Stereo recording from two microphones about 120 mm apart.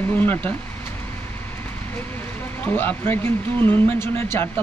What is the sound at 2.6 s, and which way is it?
Speech, 15° left (ahead or behind).